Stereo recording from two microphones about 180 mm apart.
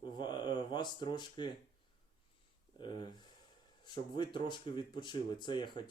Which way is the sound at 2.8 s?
25° left (ahead or behind).